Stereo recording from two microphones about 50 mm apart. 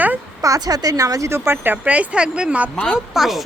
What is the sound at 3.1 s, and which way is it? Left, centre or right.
Speech, centre.